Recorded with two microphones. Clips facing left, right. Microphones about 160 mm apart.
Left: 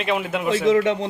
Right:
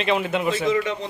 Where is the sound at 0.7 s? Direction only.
70° left (ahead or behind).